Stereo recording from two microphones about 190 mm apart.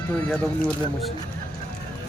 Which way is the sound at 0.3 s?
5° left (ahead or behind).